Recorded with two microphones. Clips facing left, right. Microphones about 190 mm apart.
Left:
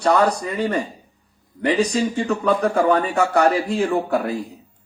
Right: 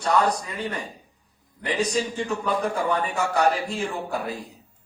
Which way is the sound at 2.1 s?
65° left (ahead or behind).